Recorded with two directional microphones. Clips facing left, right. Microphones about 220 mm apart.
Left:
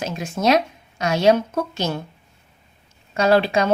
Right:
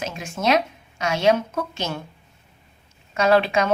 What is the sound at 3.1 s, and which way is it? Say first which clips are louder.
Speech: left 1 dB; 35° left (ahead or behind).